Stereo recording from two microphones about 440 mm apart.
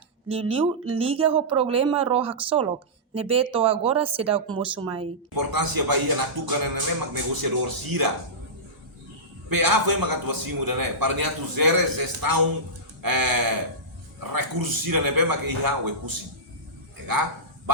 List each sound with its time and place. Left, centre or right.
0.3 s speech: centre
5.3 s a man's voice: right
9.5 s a man's voice: right